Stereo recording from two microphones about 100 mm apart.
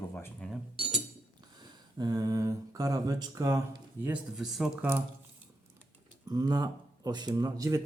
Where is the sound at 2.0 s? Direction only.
40° right (ahead or behind).